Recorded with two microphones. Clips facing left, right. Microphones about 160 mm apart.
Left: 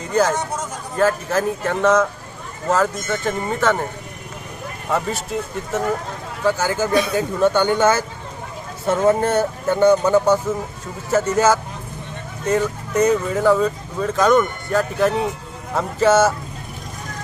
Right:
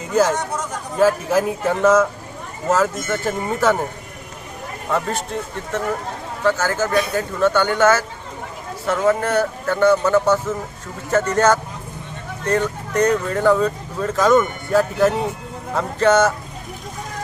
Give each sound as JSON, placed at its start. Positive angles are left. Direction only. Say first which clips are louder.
{"t": 0.0, "sound": "speech", "louder": "right 1 dB", "side_deg": -5}
{"t": 4.9, "sound": "speech", "louder": "even", "side_deg": 5}